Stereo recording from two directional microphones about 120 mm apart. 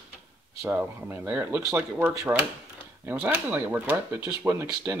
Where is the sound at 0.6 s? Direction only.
15° right (ahead or behind).